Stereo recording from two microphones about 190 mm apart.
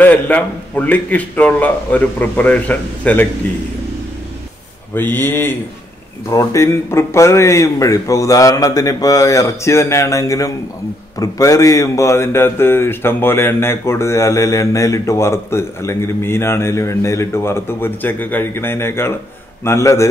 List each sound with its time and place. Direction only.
0.0 s speech: 5° left (ahead or behind)
4.9 s speech: 10° left (ahead or behind)